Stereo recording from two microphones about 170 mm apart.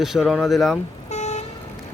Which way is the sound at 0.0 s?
Centre (ahead or behind).